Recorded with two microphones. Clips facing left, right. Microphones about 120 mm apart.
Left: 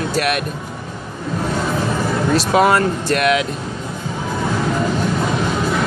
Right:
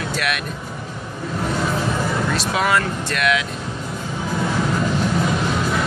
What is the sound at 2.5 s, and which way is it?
Speech, 40° left (ahead or behind).